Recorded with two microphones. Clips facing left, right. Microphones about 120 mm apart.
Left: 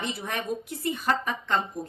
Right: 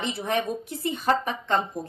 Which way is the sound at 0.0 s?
25° right (ahead or behind).